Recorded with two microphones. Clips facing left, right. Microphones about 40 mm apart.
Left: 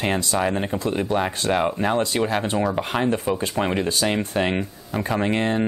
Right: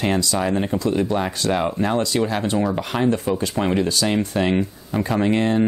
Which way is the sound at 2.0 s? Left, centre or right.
Left.